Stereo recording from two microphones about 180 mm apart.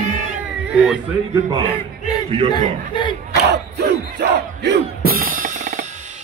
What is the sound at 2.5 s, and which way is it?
Speech, 25° left (ahead or behind).